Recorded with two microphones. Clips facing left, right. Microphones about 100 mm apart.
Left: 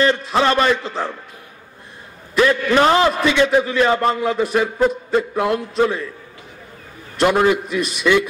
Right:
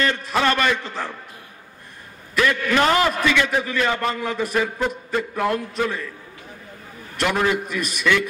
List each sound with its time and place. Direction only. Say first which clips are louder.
0.0 s a man's voice: left 4 dB; 30° left (ahead or behind)
2.3 s a man's voice: left 5 dB; 30° left (ahead or behind)
7.2 s a man's voice: left 6 dB; 40° left (ahead or behind)
7.5 s a man's voice: left 3 dB; 50° right (ahead or behind)